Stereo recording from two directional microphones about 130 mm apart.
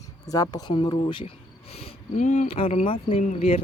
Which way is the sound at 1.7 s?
60° left (ahead or behind).